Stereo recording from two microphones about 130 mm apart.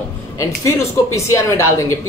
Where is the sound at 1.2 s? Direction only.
20° left (ahead or behind).